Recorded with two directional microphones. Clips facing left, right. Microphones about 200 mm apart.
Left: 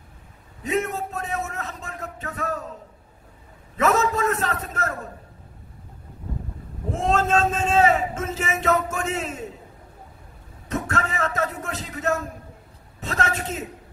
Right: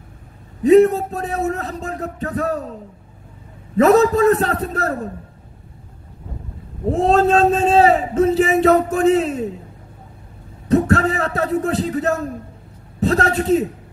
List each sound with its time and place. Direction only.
0.7 s a man's voice: 35° right (ahead or behind)
3.7 s a man's voice: 35° right (ahead or behind)
6.9 s a man's voice: 35° right (ahead or behind)
10.7 s a man's voice: 35° right (ahead or behind)